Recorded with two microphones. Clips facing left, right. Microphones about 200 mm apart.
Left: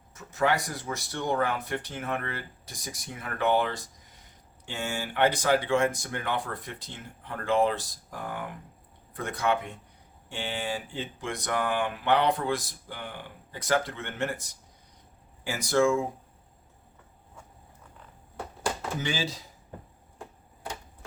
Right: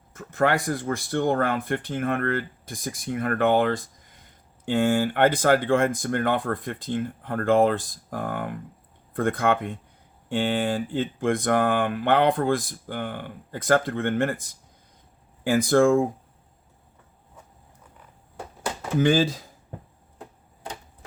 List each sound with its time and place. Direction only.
0.1 s speech: 55° right (ahead or behind)
15.4 s speech: 50° right (ahead or behind)
18.9 s speech: 50° right (ahead or behind)